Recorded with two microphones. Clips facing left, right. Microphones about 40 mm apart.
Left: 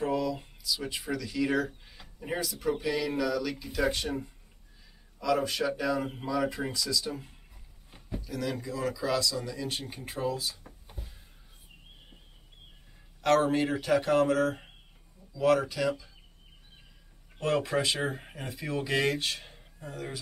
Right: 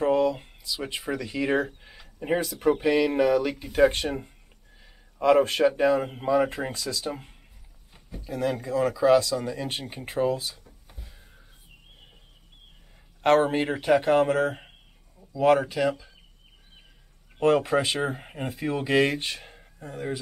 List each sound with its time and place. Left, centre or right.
0.0 s speech: right
13.2 s speech: right
17.4 s speech: right